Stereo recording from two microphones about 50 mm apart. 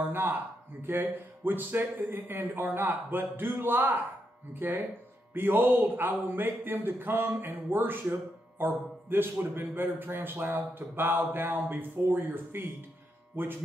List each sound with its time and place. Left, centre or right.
0.0 s a man's voice: right